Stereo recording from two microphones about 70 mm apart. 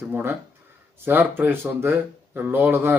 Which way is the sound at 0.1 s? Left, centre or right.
Right.